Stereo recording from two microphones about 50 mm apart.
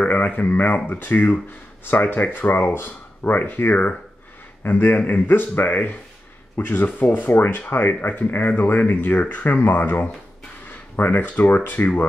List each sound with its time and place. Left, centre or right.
0.0 s speech: left